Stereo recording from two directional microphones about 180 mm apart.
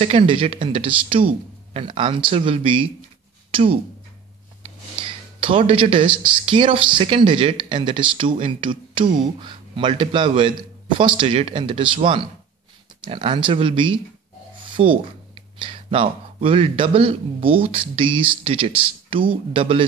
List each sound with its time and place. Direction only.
0.0 s speech: 30° right (ahead or behind)
4.6 s a sound: 30° right (ahead or behind)
6.4 s speech: 30° right (ahead or behind)
13.0 s speech: 30° right (ahead or behind)